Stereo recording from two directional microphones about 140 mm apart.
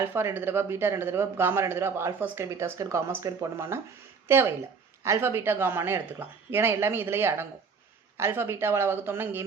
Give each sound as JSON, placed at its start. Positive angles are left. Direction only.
{"t": 0.0, "sound": "speech", "side_deg": -15}